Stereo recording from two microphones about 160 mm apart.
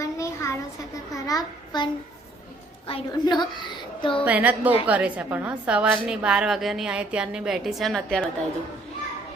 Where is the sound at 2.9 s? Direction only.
25° left (ahead or behind).